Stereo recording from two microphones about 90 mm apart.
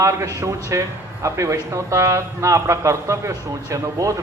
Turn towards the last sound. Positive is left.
turn(degrees=-35)  # may be behind; listen again after turning